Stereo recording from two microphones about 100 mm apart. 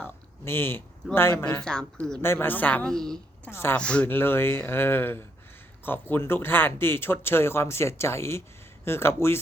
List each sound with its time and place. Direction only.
0.0 s a sound: 25° left (ahead or behind)
1.1 s speech: 25° left (ahead or behind)
1.5 s speech: 10° left (ahead or behind)
2.2 s speech: 25° left (ahead or behind)
2.8 s a woman's voice: 5° left (ahead or behind)
3.5 s speech: 25° left (ahead or behind)
3.8 s speech: 10° left (ahead or behind)
4.1 s speech: 20° left (ahead or behind)